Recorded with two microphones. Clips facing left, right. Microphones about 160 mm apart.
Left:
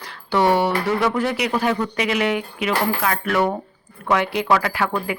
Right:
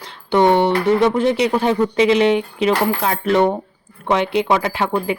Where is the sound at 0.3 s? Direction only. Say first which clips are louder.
Right 4 dB; 20° right (ahead or behind).